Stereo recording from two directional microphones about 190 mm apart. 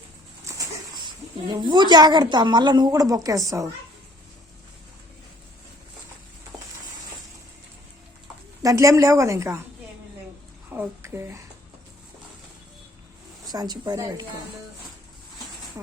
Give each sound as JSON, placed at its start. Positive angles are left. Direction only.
{"t": 0.4, "sound": "a sound", "side_deg": -15}
{"t": 1.5, "sound": "a woman's voice", "side_deg": -25}
{"t": 8.6, "sound": "a woman's voice", "side_deg": -15}
{"t": 10.7, "sound": "speech", "side_deg": -10}
{"t": 13.5, "sound": "a woman's voice", "side_deg": -20}